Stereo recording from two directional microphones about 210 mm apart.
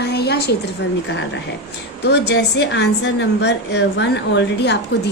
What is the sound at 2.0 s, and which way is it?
A woman's voice, 55° left (ahead or behind).